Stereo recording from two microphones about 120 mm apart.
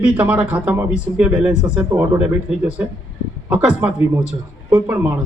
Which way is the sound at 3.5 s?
5° right (ahead or behind).